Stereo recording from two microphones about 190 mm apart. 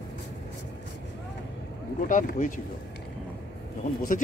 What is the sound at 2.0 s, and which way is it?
Speech, 45° left (ahead or behind).